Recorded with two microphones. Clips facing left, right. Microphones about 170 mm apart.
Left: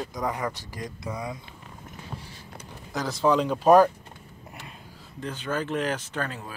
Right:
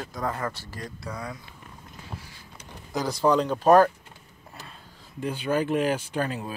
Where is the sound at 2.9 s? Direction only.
Centre (ahead or behind).